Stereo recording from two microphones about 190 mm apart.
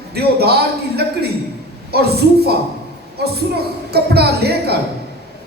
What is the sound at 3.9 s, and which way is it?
Speech, 55° right (ahead or behind).